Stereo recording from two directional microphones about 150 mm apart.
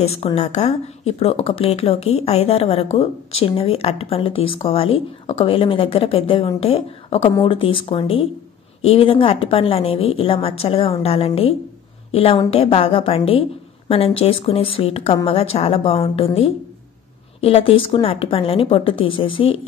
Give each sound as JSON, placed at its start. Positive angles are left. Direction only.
{"t": 0.0, "sound": "speech", "side_deg": 40}